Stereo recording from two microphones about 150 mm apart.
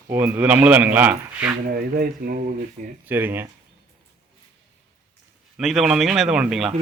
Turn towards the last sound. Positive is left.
turn(degrees=-5)  # may be behind; listen again after turning